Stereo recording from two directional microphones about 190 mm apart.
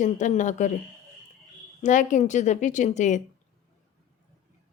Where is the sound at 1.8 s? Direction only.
40° left (ahead or behind).